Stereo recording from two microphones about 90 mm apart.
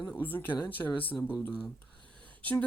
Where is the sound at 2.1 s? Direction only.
15° left (ahead or behind).